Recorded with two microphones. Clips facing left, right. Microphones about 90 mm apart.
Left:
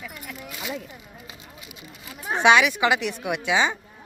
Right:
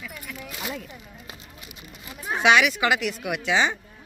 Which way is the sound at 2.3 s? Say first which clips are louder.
Left 2 dB; 20° left (ahead or behind).